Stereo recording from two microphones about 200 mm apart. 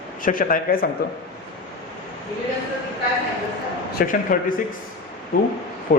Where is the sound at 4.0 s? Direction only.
45° left (ahead or behind).